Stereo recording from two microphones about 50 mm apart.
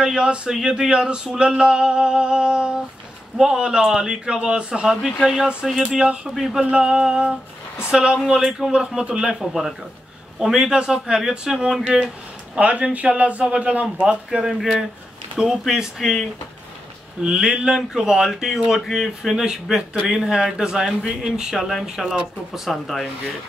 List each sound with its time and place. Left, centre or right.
0.0 s speech: centre
6.7 s speech: centre
16.0 s speech: centre
17.2 s speech: centre
22.7 s speech: centre